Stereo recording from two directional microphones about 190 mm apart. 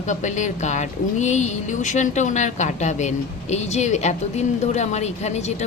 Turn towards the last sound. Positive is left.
turn(degrees=35)  # may be behind; listen again after turning